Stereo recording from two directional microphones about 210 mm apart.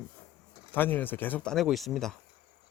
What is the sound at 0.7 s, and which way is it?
Speech, 10° left (ahead or behind).